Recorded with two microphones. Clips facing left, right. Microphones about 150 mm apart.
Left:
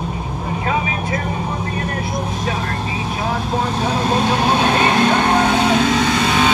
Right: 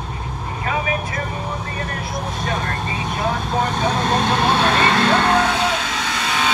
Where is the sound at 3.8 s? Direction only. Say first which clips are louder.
Left 1 dB; 10° left (ahead or behind); by 6.5 s 25° left (ahead or behind).